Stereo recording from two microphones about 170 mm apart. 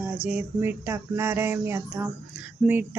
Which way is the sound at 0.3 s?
15° right (ahead or behind).